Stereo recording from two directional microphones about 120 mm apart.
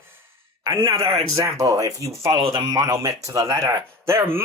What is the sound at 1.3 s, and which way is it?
Speech, 25° right (ahead or behind).